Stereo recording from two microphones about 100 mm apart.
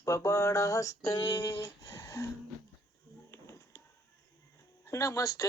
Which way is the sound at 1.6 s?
30° left (ahead or behind).